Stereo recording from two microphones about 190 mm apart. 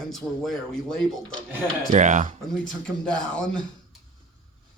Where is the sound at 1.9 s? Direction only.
40° right (ahead or behind).